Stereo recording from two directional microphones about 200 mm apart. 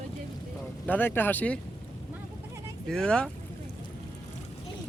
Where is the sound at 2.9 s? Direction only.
5° left (ahead or behind).